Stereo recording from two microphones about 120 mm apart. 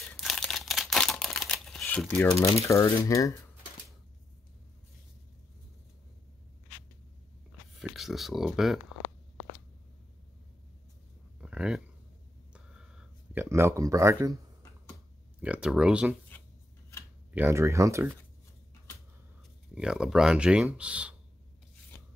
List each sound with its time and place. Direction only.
0.1 s a sound: 5° left (ahead or behind)
2.1 s speech: 5° left (ahead or behind)
2.4 s speech: 25° left (ahead or behind)
7.8 s speech: centre (ahead or behind)
11.4 s a sound: 5° right (ahead or behind); by 14.3 s 25° right (ahead or behind)
15.4 s speech: 10° right (ahead or behind)
17.3 s speech: 15° right (ahead or behind)
19.7 s speech: 5° right (ahead or behind)